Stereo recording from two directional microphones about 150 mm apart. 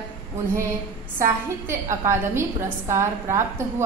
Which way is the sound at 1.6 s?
15° right (ahead or behind).